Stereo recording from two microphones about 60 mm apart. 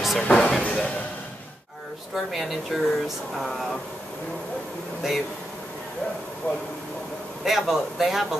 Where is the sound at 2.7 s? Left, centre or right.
Centre.